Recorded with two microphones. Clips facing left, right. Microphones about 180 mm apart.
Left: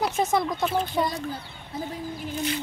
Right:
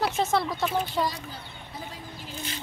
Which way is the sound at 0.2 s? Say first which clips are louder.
Left 3 dB; 15° left (ahead or behind).